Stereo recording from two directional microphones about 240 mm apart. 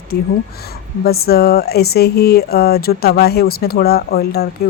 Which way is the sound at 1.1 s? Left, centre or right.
Left.